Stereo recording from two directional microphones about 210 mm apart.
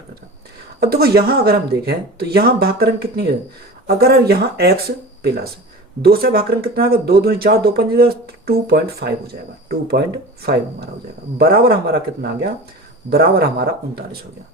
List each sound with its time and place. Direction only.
0.8 s speech: 45° right (ahead or behind)